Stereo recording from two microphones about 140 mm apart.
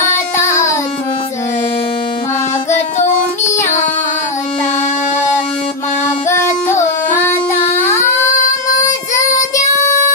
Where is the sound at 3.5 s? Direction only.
55° left (ahead or behind).